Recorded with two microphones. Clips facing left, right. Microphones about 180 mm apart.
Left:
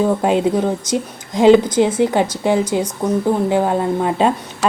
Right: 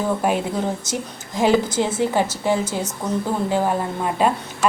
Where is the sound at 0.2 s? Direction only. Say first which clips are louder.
Left 6 dB; 20° left (ahead or behind).